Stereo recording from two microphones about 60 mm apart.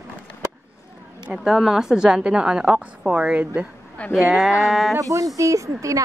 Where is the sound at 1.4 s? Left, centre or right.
Centre.